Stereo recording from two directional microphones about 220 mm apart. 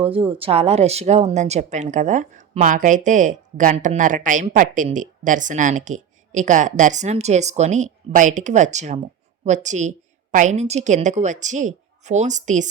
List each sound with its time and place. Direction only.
0.0 s a woman's voice: 25° right (ahead or behind)